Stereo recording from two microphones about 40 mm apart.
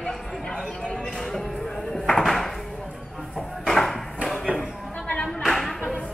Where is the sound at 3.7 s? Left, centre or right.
Centre.